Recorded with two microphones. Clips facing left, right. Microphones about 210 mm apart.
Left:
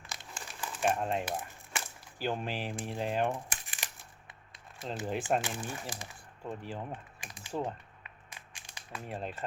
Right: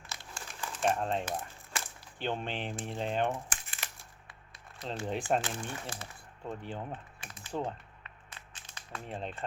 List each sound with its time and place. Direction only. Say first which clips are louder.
0.1 s crumpling: even; 20° left (ahead or behind)
0.6 s speech: even; 5° left (ahead or behind)
4.8 s speech: even; 5° left (ahead or behind)
6.4 s speech: even; centre (ahead or behind)
6.9 s typing: even; 15° left (ahead or behind)
7.5 s a sound: even; 10° left (ahead or behind)